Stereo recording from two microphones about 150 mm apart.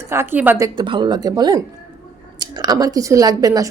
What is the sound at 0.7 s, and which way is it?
Speech, 35° right (ahead or behind).